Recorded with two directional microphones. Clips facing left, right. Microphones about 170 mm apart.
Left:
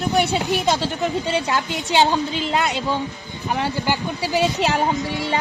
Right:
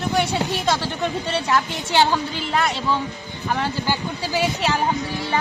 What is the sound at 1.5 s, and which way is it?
A woman's voice, 20° left (ahead or behind).